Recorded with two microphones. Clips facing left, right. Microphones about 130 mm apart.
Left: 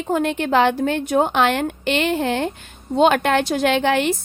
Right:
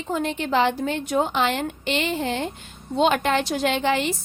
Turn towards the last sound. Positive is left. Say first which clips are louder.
# left 4 dB
turn(degrees=60)  # may be behind; listen again after turning